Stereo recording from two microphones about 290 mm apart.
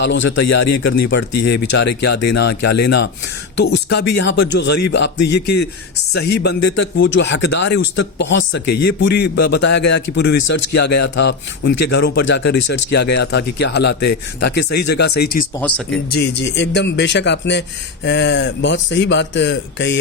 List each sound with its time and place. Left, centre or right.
0.0 s speech: left